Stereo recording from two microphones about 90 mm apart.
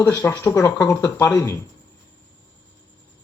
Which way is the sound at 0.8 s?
45° left (ahead or behind).